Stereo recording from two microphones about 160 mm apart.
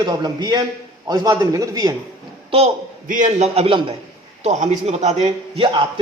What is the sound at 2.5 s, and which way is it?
A man's voice, 40° right (ahead or behind).